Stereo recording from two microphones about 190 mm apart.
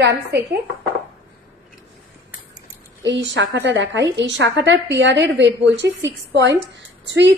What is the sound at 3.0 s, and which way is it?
A woman's voice, 70° right (ahead or behind).